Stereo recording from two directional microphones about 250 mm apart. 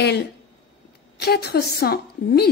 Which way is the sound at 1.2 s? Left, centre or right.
Left.